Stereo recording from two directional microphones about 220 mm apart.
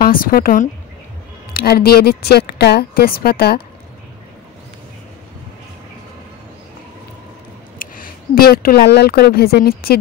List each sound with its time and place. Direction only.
0.0 s a woman's voice: 40° left (ahead or behind)
7.8 s speech: 40° left (ahead or behind)